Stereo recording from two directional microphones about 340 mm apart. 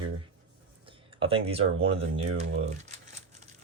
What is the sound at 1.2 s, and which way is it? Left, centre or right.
Speech, centre.